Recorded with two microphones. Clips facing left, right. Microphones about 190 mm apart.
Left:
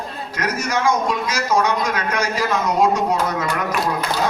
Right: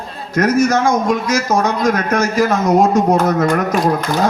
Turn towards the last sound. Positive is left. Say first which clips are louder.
# right 6 dB
turn(degrees=-45)  # may be behind; listen again after turning